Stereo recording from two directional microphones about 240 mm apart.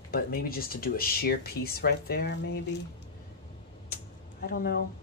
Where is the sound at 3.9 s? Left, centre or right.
Left.